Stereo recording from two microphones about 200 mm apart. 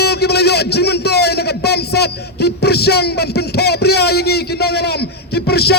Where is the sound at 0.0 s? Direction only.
55° left (ahead or behind).